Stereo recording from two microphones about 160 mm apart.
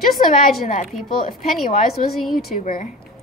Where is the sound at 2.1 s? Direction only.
Centre (ahead or behind).